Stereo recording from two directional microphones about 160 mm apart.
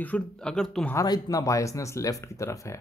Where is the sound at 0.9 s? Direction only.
20° left (ahead or behind).